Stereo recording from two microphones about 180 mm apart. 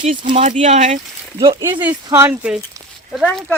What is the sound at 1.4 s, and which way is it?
Speech, 25° right (ahead or behind).